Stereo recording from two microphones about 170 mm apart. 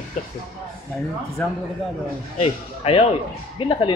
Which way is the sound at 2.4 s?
35° left (ahead or behind).